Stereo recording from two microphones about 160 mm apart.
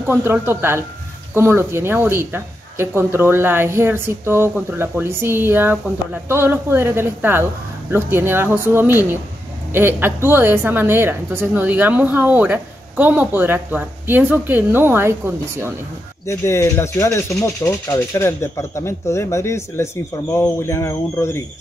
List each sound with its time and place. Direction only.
0.0 s a woman's voice: 15° right (ahead or behind)
16.3 s speech: 15° left (ahead or behind)